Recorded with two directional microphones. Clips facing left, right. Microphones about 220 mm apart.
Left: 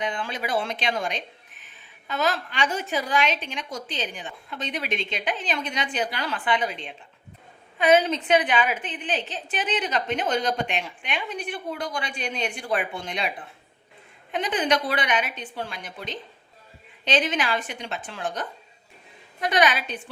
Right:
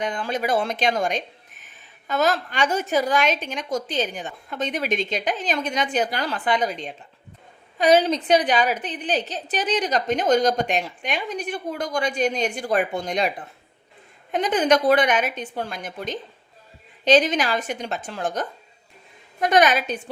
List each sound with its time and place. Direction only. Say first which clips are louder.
0.0 s a woman's voice: right 4 dB; 45° right (ahead or behind)
14.3 s a woman's voice: right 5 dB; 45° right (ahead or behind)